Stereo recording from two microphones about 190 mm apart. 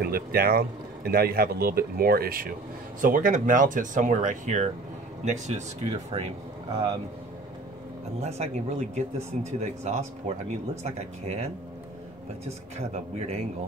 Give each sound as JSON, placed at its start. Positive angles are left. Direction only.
{"t": 0.0, "sound": "speech", "side_deg": -50}
{"t": 8.2, "sound": "speech", "side_deg": -35}
{"t": 12.7, "sound": "speech", "side_deg": -35}